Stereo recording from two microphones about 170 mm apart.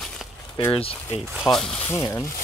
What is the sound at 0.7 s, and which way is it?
Speech, 35° left (ahead or behind).